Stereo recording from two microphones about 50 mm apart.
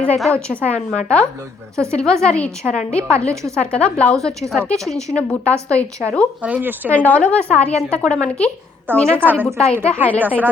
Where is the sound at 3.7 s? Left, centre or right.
Left.